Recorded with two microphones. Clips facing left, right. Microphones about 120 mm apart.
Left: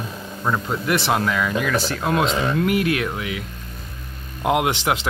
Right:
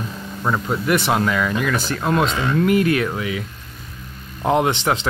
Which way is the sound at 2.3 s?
20° left (ahead or behind).